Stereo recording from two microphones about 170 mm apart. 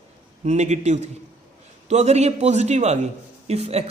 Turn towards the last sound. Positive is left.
turn(degrees=-40)  # may be behind; listen again after turning